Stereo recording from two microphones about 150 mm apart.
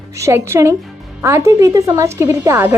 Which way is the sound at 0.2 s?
20° right (ahead or behind).